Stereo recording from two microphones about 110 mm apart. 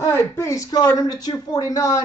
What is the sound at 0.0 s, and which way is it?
Speech, 25° left (ahead or behind).